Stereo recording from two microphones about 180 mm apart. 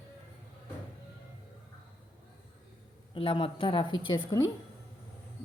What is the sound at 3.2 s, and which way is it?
A woman's voice, 30° left (ahead or behind).